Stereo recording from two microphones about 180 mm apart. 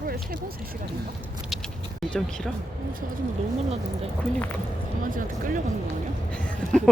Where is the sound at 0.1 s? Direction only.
55° right (ahead or behind).